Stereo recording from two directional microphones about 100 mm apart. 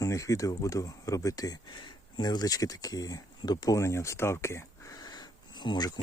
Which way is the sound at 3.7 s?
30° left (ahead or behind).